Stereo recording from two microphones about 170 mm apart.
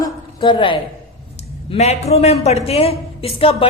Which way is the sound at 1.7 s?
40° left (ahead or behind).